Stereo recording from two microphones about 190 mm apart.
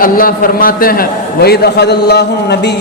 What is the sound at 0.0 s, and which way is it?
A man's voice, 50° left (ahead or behind).